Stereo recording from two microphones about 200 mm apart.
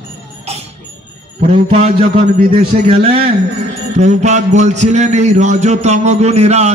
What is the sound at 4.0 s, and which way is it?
Music, 35° right (ahead or behind).